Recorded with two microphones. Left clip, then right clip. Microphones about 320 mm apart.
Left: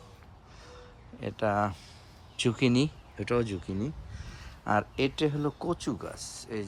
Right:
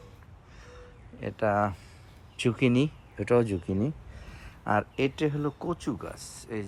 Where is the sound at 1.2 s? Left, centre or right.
Centre.